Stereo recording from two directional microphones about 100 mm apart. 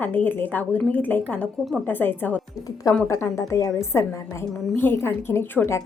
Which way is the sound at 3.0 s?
30° left (ahead or behind).